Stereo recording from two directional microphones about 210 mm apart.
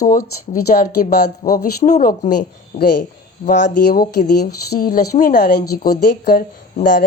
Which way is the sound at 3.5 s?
50° left (ahead or behind).